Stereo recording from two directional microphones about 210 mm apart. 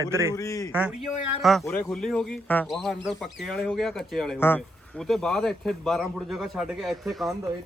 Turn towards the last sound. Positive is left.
turn(degrees=0)  # may be behind; listen again after turning